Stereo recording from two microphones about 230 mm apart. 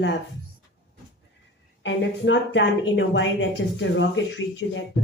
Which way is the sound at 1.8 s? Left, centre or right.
Left.